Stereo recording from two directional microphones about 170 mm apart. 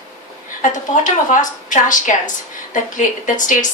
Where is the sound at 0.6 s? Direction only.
50° left (ahead or behind).